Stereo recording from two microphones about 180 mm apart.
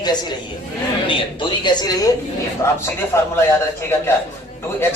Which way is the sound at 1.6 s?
20° left (ahead or behind).